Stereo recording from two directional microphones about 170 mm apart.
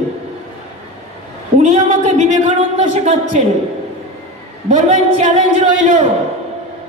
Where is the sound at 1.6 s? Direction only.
45° right (ahead or behind).